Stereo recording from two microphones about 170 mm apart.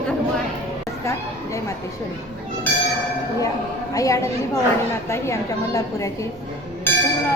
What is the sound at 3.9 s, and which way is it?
A woman's voice, 20° left (ahead or behind).